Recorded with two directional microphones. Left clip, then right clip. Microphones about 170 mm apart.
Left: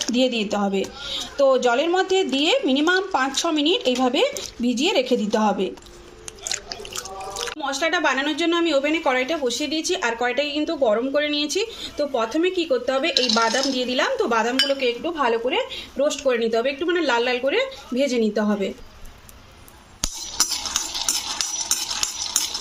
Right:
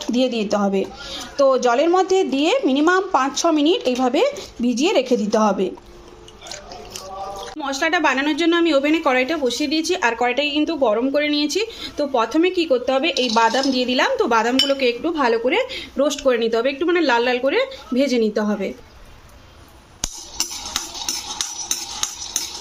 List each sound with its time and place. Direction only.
0.1 s a woman's voice: centre (ahead or behind)
1.5 s a woman's voice: 5° right (ahead or behind)
7.6 s a woman's voice: centre (ahead or behind); by 16.0 s 15° right (ahead or behind)
16.0 s a woman's voice: 5° right (ahead or behind)